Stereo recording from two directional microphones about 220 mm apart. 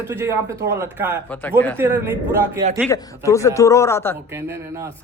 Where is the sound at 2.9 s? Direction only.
15° left (ahead or behind).